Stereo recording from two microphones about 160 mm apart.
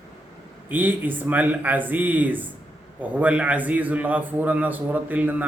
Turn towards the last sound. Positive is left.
turn(degrees=-10)  # may be behind; listen again after turning